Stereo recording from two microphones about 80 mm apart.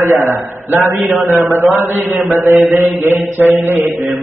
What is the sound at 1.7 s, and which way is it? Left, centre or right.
Mantra, right.